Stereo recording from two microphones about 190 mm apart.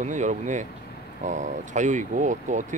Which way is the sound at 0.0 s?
40° right (ahead or behind).